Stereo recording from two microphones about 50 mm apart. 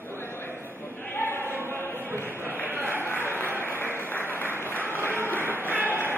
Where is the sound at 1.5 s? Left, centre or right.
Right.